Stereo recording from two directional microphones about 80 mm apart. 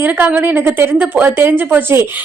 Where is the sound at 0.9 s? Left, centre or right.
Centre.